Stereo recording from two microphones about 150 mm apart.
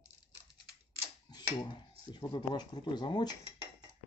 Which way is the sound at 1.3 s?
30° left (ahead or behind).